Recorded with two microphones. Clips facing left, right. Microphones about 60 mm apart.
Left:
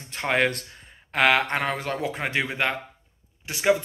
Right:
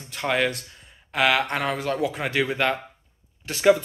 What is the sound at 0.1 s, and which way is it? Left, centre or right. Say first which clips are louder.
Speech: even; left.